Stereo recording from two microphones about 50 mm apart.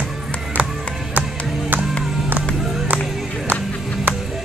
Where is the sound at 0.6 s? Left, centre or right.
Right.